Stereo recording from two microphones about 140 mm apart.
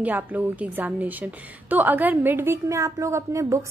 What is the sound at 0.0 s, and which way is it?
A woman's voice, 10° right (ahead or behind).